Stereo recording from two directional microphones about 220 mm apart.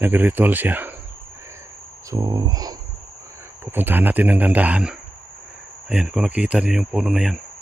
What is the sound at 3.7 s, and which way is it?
Speech, 10° right (ahead or behind).